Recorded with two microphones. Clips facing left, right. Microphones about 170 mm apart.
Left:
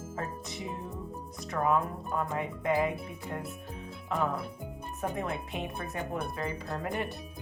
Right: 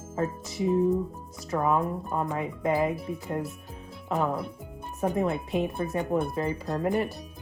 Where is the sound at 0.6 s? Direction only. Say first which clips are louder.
Right 18 dB; centre (ahead or behind).